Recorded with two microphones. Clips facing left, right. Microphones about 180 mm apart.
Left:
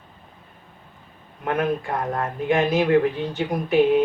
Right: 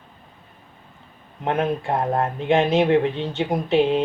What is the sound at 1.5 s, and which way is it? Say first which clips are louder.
Speech: right 1 dB; 25° right (ahead or behind).